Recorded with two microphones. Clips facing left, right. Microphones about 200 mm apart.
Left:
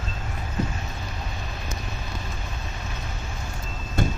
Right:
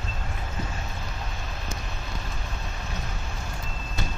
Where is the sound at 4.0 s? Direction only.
50° left (ahead or behind).